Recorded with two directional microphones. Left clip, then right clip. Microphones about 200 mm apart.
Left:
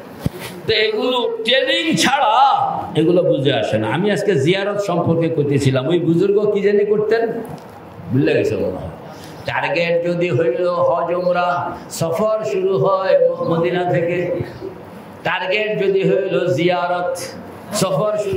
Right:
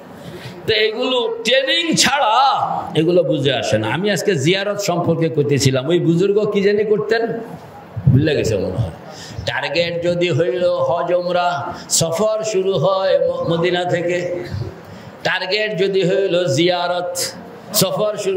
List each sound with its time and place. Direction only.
0.7 s a man's voice: 50° right (ahead or behind)
8.2 s a man's voice: 60° right (ahead or behind)
15.2 s a man's voice: 65° right (ahead or behind)